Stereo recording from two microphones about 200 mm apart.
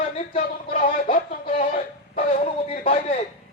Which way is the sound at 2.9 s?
30° left (ahead or behind).